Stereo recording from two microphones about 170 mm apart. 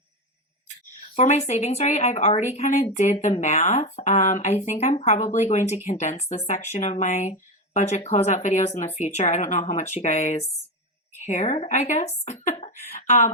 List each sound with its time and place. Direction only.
1.1 s a woman's voice: 40° left (ahead or behind)